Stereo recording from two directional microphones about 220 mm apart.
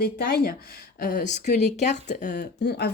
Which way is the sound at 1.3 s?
30° left (ahead or behind).